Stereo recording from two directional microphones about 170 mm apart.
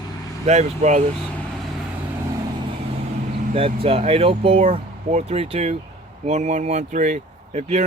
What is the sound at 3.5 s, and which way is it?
Speech, 35° right (ahead or behind).